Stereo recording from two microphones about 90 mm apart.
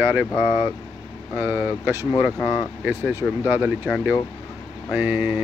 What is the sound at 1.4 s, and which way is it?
Speech, 25° right (ahead or behind).